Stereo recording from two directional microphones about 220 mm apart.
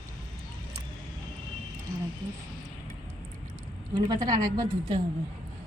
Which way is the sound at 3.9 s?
20° right (ahead or behind).